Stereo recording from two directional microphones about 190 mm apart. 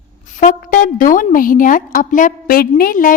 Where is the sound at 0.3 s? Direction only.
45° left (ahead or behind).